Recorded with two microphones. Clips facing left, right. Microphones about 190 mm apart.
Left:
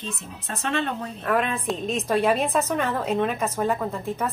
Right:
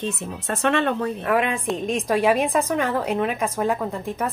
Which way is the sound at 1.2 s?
10° right (ahead or behind).